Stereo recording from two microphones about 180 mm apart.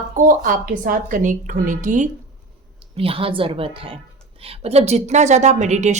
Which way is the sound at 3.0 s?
30° right (ahead or behind).